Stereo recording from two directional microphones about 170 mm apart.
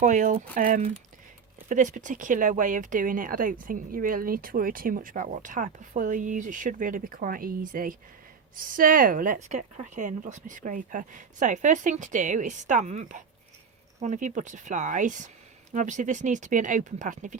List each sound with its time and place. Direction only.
0.0 s speech: 50° right (ahead or behind)